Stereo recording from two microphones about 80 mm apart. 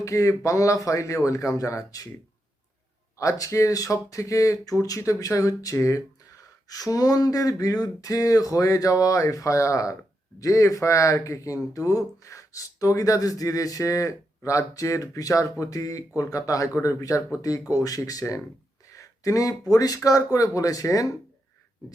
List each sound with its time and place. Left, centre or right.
0.0 s speech: left
3.2 s speech: left